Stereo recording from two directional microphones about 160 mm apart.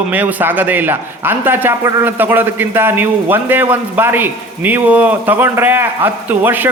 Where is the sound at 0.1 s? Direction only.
10° right (ahead or behind).